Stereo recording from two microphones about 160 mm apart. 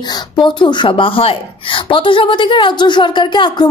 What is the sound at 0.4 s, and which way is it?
A woman's voice, 30° left (ahead or behind).